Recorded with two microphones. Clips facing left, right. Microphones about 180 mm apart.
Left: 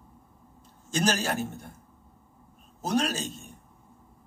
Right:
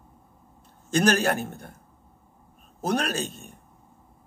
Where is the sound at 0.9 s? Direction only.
60° right (ahead or behind).